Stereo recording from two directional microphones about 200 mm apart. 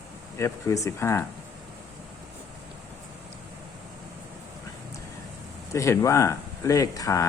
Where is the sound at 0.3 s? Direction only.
15° left (ahead or behind).